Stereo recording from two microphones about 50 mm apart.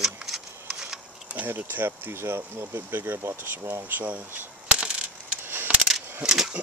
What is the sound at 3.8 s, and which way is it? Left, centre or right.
Coin, right.